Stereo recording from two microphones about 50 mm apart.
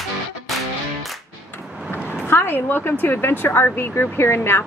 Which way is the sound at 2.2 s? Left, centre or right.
Left.